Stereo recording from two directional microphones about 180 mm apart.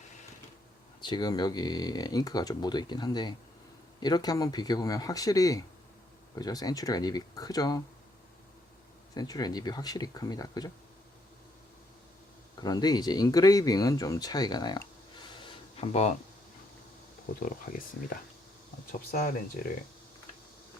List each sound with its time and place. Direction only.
1.0 s speech: 25° left (ahead or behind)
9.1 s speech: 20° left (ahead or behind)
12.5 s speech: 20° left (ahead or behind)
17.4 s speech: 50° left (ahead or behind)